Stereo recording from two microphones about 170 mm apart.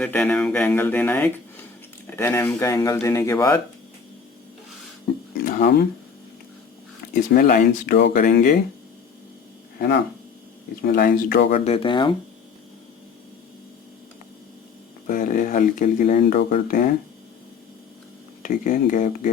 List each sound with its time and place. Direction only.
0.0 s speech: 5° left (ahead or behind)
5.5 s speech: 60° left (ahead or behind)
7.1 s speech: 55° left (ahead or behind)
9.7 s speech: 70° left (ahead or behind)
10.8 s speech: 60° left (ahead or behind)
11.6 s speech: 35° left (ahead or behind)
15.0 s speech: 55° left (ahead or behind)
16.6 s speech: 55° left (ahead or behind)
18.4 s speech: 50° left (ahead or behind)